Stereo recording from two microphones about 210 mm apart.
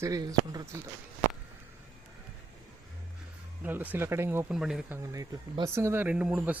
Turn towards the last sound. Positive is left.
turn(degrees=-5)  # may be behind; listen again after turning